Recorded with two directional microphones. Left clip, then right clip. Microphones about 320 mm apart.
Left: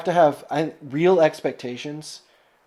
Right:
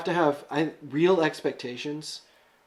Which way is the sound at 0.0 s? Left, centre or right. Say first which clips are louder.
Left 7 dB; left.